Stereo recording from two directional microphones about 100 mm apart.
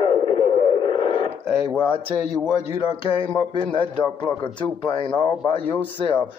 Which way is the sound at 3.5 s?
60° left (ahead or behind).